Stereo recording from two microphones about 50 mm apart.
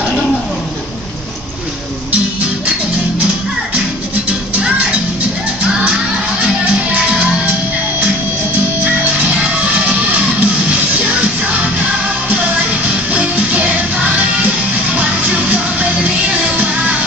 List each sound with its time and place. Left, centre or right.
8.8 s music: right
13.1 s music: right
15.5 s music: right